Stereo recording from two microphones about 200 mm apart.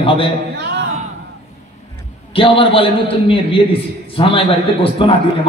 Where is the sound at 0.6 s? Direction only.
55° right (ahead or behind).